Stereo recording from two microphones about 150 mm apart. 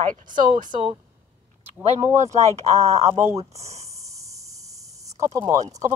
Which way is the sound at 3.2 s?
20° right (ahead or behind).